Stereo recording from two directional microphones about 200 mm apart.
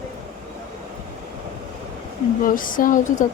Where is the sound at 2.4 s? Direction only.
45° left (ahead or behind).